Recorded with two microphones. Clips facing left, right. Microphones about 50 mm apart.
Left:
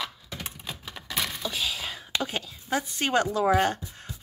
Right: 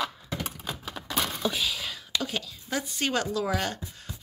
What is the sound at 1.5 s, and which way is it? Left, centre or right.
A woman's voice, centre.